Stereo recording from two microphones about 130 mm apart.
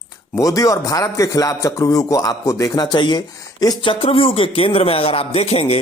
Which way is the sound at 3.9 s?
45° left (ahead or behind).